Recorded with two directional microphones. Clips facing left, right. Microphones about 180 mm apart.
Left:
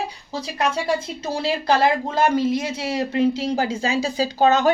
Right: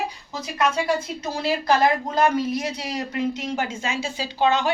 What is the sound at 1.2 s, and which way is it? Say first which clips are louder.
Speech: left 1 dB; 30° left (ahead or behind).